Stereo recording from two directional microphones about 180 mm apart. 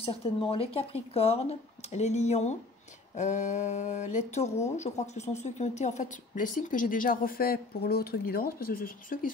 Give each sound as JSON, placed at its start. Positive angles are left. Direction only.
{"t": 0.0, "sound": "speech", "side_deg": 30}